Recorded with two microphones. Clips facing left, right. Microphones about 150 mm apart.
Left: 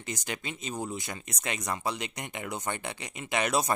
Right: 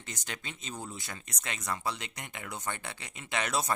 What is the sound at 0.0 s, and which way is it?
Speech, 10° left (ahead or behind).